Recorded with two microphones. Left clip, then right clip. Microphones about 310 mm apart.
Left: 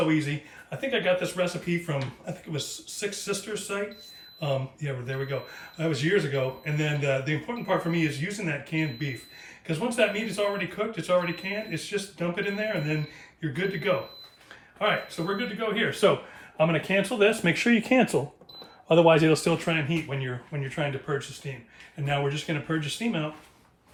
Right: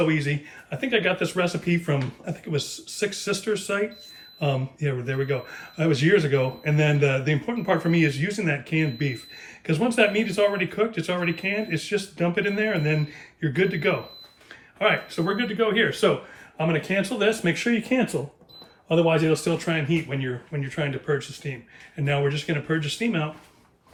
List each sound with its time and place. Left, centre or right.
0.1 s speech: centre
16.0 s speech: centre